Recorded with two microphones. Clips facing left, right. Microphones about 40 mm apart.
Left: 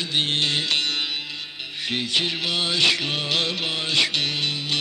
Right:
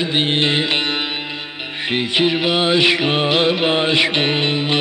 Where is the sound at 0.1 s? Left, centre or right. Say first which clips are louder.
Right 3 dB; right.